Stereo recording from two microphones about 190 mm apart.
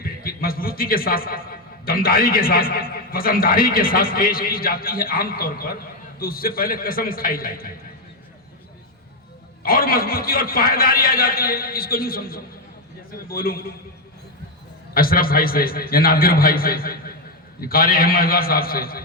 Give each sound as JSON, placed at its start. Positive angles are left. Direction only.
{"t": 0.0, "sound": "a man's voice", "side_deg": 50}
{"t": 9.6, "sound": "a man's voice", "side_deg": 50}
{"t": 14.9, "sound": "a man's voice", "side_deg": 50}